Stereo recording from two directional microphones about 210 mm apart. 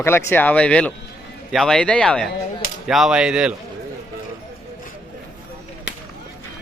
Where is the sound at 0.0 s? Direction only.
10° left (ahead or behind); by 3.5 s 5° right (ahead or behind).